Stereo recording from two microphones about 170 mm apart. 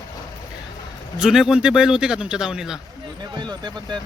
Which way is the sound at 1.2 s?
Centre (ahead or behind).